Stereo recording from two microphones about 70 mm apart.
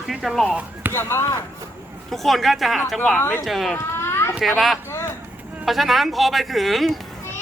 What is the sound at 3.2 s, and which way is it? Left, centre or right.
Speech, left.